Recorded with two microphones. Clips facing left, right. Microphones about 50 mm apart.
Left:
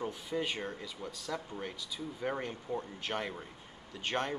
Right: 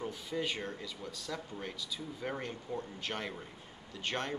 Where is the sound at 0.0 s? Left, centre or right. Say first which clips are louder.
Left 1 dB; centre.